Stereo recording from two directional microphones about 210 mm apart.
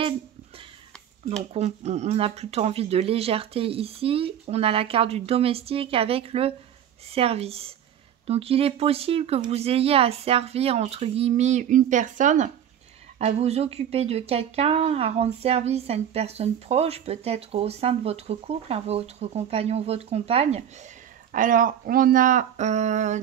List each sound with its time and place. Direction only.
1.3 s speech: 30° right (ahead or behind)
21.3 s speech: 40° right (ahead or behind)